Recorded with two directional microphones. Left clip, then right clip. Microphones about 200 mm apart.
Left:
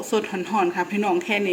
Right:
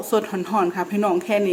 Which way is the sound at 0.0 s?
5° right (ahead or behind).